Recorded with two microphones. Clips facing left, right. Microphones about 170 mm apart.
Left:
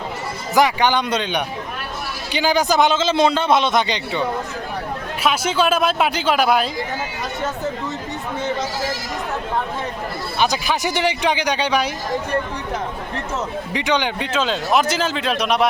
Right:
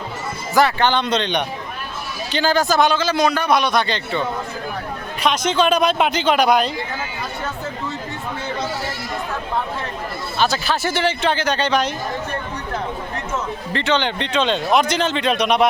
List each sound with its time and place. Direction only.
0.5 s a man's voice: 15° left (ahead or behind)
10.4 s speech: 15° left (ahead or behind)
13.7 s speech: 15° left (ahead or behind)